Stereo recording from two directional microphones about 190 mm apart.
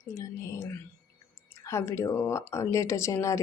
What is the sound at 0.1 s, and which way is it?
Speech, 15° left (ahead or behind).